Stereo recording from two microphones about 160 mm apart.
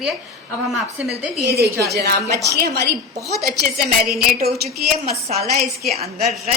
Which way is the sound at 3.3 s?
75° right (ahead or behind).